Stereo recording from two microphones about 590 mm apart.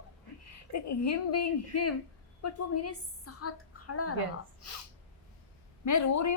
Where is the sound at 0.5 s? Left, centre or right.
Left.